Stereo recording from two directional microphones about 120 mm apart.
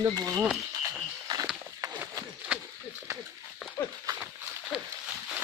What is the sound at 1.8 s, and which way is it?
Horse, 25° right (ahead or behind).